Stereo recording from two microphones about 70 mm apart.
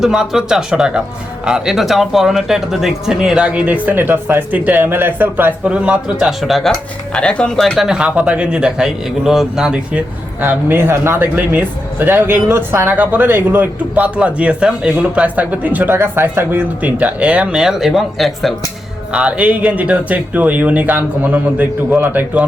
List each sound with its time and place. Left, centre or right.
0.0 s a man's voice: centre
3.8 s speech: right
5.6 s a man's voice: centre
7.1 s speech: centre
7.8 s a man's voice: centre
10.4 s speech: right
16.6 s a man's voice: right; by 18.5 s centre
19.1 s speech: centre